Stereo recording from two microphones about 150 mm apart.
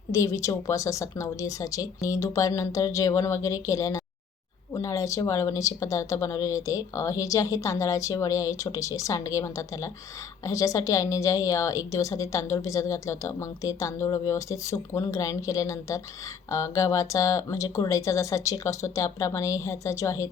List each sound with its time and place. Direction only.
0.1 s a woman's voice: 20° left (ahead or behind)